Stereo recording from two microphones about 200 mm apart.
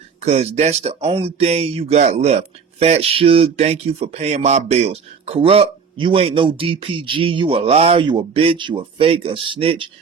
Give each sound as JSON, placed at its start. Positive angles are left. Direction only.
{"t": 0.2, "sound": "speech", "side_deg": -30}